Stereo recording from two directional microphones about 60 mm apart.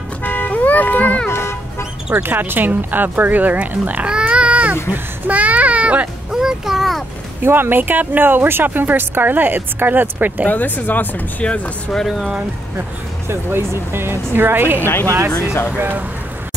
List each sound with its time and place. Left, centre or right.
0.2 s vehicle: left
1.3 s toot: left
2.2 s speech: right
4.1 s baby cry: centre
4.9 s a child's voice: right
5.4 s a sound: right
6.3 s a child's voice: centre
7.4 s speech: right
10.5 s speech: left
11.9 s speech: centre
13.3 s speech: right